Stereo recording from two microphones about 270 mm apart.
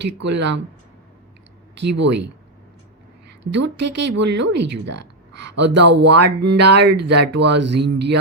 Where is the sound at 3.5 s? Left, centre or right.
Right.